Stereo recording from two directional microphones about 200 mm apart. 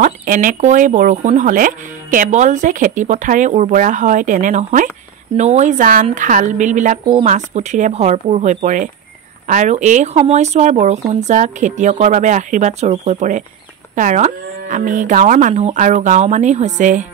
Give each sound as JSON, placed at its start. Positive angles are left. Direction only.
{"t": 0.0, "sound": "speech", "side_deg": -45}